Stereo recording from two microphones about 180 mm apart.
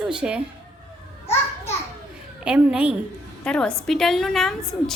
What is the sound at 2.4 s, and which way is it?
Speech, 5° right (ahead or behind).